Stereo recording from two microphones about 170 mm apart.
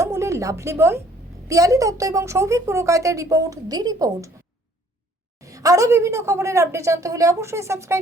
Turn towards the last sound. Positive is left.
turn(degrees=-15)  # may be behind; listen again after turning